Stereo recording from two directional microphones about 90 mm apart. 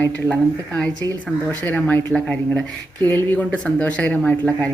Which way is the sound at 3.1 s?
20° left (ahead or behind).